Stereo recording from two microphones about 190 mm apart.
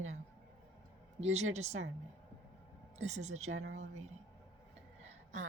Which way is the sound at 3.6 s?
90° right.